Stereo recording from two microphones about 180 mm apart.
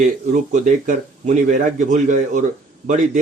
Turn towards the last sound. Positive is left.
turn(degrees=-45)  # may be behind; listen again after turning